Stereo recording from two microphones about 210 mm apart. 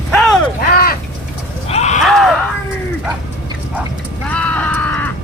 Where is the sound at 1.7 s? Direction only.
30° left (ahead or behind).